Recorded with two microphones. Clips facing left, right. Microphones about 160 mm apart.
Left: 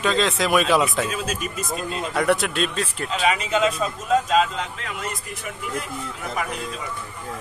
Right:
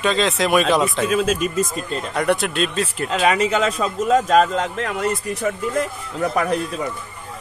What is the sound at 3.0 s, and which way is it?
Speech, 40° right (ahead or behind).